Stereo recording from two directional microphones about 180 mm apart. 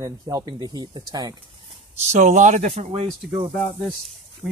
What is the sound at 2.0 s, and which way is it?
Speech, 40° right (ahead or behind).